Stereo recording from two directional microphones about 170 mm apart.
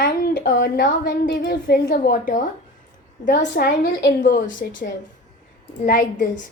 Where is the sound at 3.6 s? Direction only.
55° left (ahead or behind).